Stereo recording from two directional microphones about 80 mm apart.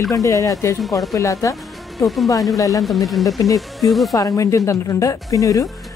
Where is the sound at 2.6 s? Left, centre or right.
Left.